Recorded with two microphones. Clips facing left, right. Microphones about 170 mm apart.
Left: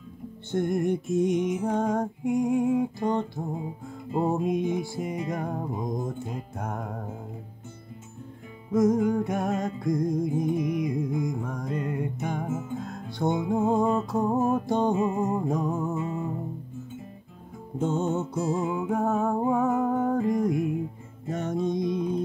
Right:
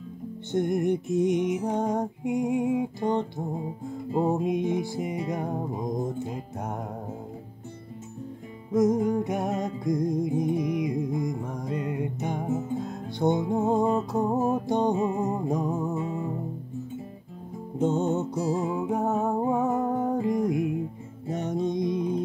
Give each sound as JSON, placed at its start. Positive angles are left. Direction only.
{"t": 0.5, "sound": "music", "side_deg": -20}
{"t": 4.3, "sound": "music", "side_deg": -20}
{"t": 8.7, "sound": "music", "side_deg": -20}
{"t": 12.4, "sound": "music", "side_deg": -35}
{"t": 13.2, "sound": "music", "side_deg": -20}
{"t": 17.7, "sound": "music", "side_deg": -20}
{"t": 18.3, "sound": "music", "side_deg": -40}
{"t": 18.9, "sound": "music", "side_deg": -20}